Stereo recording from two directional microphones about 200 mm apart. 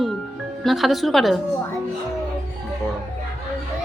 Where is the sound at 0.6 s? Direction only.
Centre (ahead or behind).